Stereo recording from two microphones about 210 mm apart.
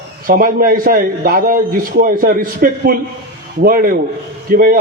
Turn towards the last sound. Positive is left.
turn(degrees=-45)  # may be behind; listen again after turning